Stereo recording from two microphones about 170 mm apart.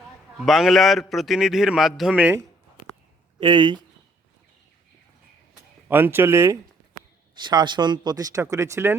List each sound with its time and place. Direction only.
0.3 s a man's voice: centre (ahead or behind)
3.4 s speech: 25° right (ahead or behind)
5.9 s speech: 15° right (ahead or behind)
7.3 s speech: 25° right (ahead or behind)